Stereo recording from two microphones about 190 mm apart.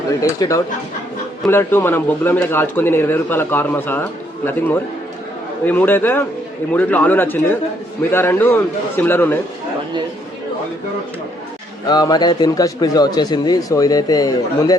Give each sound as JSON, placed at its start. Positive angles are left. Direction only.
{"t": 0.2, "sound": "a man's voice", "side_deg": 15}
{"t": 5.6, "sound": "a man's voice", "side_deg": 10}
{"t": 11.9, "sound": "speech", "side_deg": 20}